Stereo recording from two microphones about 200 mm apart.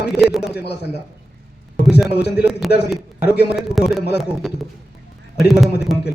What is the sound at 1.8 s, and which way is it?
Speech, 5° right (ahead or behind).